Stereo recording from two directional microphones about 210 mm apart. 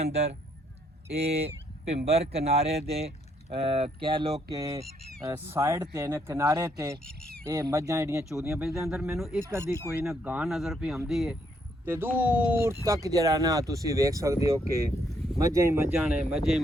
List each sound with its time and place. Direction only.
0.0 s speech: 30° right (ahead or behind); by 7.0 s 15° right (ahead or behind)
7.0 s speech: 5° left (ahead or behind)
7.4 s speech: 15° right (ahead or behind)
8.3 s speech: centre (ahead or behind)
8.7 s speech: 15° right (ahead or behind)
9.0 s speech: centre (ahead or behind)
9.5 s speech: 10° right (ahead or behind)